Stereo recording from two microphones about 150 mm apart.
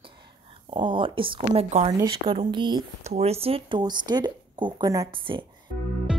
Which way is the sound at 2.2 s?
35° right (ahead or behind).